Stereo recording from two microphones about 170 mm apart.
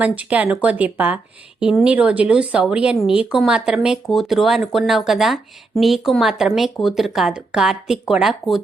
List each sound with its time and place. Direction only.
0.0 s speech: 10° right (ahead or behind)